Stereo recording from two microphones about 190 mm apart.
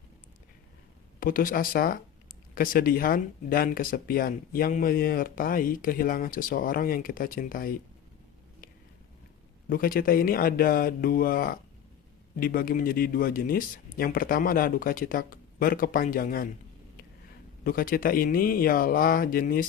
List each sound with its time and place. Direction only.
1.2 s speech: 45° left (ahead or behind)
9.6 s speech: 50° left (ahead or behind)
17.6 s speech: 50° left (ahead or behind)